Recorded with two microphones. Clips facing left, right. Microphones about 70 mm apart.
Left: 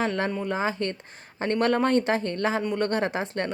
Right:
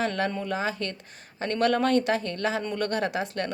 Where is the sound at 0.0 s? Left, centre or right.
Left.